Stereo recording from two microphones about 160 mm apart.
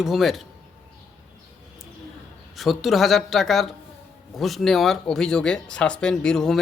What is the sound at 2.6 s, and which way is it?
Speech, centre (ahead or behind).